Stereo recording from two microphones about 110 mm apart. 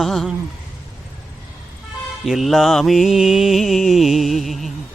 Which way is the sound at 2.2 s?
Centre (ahead or behind).